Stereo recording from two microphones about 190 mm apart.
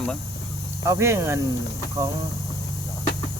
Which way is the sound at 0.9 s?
15° right (ahead or behind).